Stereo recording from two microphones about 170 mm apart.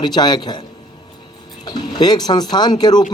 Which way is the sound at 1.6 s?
25° left (ahead or behind).